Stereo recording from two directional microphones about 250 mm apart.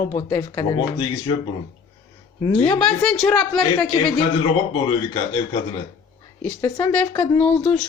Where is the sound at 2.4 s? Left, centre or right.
Centre.